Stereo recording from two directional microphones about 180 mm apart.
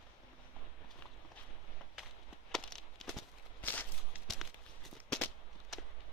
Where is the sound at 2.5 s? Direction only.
5° left (ahead or behind).